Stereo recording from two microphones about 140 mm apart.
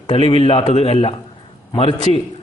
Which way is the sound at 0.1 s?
40° left (ahead or behind).